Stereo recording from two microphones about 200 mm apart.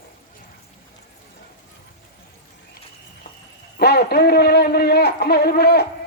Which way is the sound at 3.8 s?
55° left (ahead or behind).